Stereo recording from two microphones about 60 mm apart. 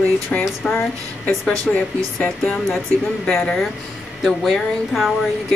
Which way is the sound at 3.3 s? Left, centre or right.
Centre.